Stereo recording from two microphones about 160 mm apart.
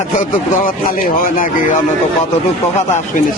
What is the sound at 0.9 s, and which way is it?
Speech, 60° left (ahead or behind).